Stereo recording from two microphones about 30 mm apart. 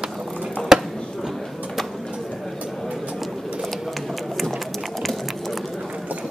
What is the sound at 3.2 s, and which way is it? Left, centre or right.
Typing, centre.